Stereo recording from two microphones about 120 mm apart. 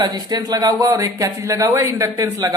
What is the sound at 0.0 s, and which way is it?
A woman's voice, 35° right (ahead or behind).